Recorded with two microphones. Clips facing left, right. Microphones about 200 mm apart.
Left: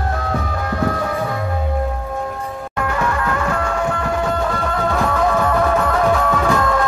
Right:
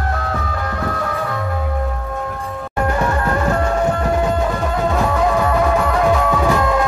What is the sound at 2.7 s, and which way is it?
Music, 30° right (ahead or behind).